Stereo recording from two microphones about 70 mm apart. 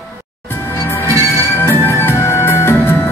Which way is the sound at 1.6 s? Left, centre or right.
Left.